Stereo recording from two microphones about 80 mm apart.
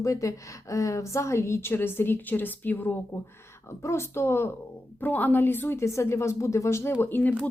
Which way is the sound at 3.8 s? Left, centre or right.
Left.